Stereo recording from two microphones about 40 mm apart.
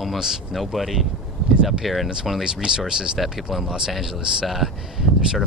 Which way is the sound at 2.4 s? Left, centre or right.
Centre.